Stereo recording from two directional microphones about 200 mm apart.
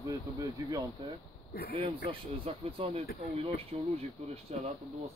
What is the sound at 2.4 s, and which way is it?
Speech, 30° right (ahead or behind).